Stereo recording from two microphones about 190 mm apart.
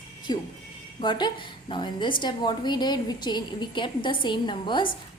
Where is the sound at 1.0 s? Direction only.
25° left (ahead or behind).